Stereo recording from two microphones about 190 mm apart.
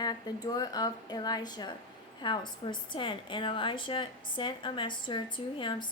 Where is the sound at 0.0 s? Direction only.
20° left (ahead or behind).